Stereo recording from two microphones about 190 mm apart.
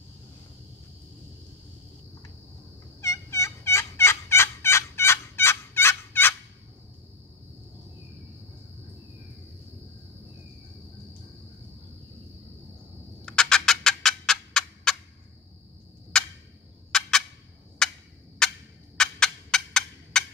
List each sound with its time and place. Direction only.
3.0 s fowl: 15° left (ahead or behind)
13.2 s turkey: 5° left (ahead or behind)
16.1 s turkey: 5° left (ahead or behind)
17.8 s gobble: 5° left (ahead or behind)
18.4 s turkey: 5° left (ahead or behind)